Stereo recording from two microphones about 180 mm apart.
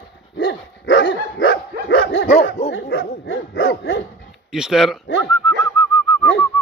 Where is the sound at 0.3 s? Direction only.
75° left (ahead or behind).